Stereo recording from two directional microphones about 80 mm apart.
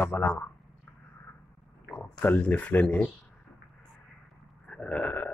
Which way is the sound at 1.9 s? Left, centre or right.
Left.